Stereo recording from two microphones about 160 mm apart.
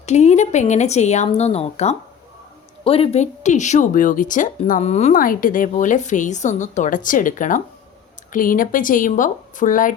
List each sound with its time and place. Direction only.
0.0 s a woman's voice: 45° left (ahead or behind)
5.1 s a woman's voice: 60° left (ahead or behind)